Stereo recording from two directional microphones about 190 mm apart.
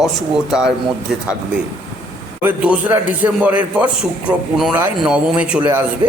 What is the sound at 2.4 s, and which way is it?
A man's voice, 5° right (ahead or behind).